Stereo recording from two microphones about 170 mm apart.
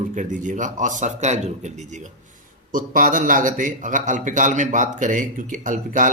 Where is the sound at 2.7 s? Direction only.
55° right (ahead or behind).